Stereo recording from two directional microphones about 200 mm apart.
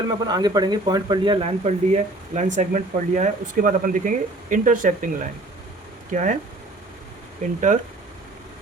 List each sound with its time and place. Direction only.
0.3 s speech: 20° right (ahead or behind); by 6.3 s 40° right (ahead or behind)
7.4 s speech: 40° right (ahead or behind)